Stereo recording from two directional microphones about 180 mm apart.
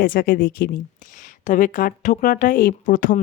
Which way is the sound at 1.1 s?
45° left (ahead or behind).